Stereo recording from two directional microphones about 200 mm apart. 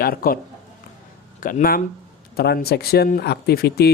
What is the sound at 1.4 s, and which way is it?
Speech, 45° left (ahead or behind).